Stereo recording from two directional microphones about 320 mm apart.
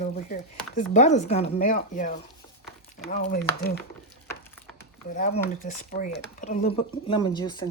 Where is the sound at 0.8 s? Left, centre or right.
Left.